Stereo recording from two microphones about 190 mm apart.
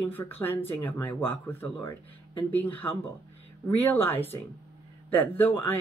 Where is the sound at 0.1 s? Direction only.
10° left (ahead or behind).